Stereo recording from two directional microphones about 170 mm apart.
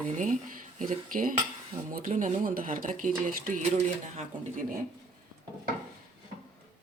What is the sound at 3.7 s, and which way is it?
Speech, 40° right (ahead or behind).